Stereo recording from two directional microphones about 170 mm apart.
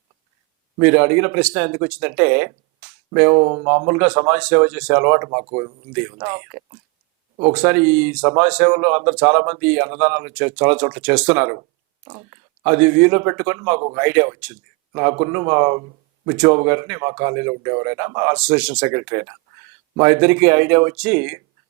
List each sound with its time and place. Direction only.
0.8 s speech: 10° right (ahead or behind)
3.3 s speech: 25° right (ahead or behind)
5.9 s speech: 15° right (ahead or behind)
12.0 s speech: 25° right (ahead or behind)
12.6 s speech: 15° right (ahead or behind)
18.3 s speech: 5° right (ahead or behind)